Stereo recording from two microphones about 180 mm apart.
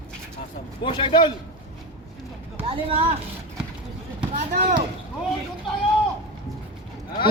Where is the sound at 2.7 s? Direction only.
30° right (ahead or behind).